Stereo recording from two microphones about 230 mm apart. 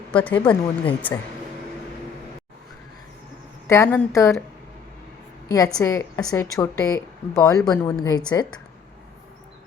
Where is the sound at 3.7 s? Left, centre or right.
Centre.